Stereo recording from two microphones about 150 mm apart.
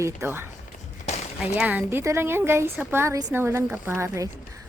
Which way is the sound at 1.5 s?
10° right (ahead or behind).